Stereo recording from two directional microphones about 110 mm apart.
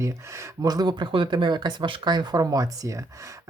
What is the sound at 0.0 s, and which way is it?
Speech, 25° right (ahead or behind).